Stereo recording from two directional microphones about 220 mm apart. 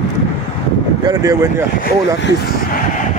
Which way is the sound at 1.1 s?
15° right (ahead or behind).